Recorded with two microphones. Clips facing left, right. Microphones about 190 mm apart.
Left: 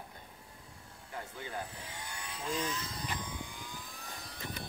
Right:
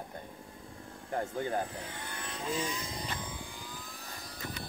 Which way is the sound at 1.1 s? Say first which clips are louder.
Right 10 dB; 45° right (ahead or behind).